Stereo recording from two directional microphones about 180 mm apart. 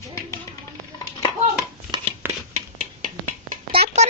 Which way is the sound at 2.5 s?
40° right (ahead or behind).